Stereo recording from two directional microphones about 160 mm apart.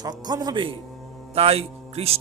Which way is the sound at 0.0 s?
25° right (ahead or behind).